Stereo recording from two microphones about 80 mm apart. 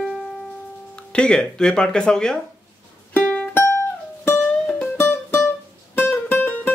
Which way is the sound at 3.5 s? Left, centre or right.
Left.